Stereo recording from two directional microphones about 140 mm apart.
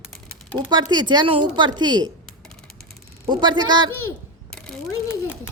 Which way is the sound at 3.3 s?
30° right (ahead or behind).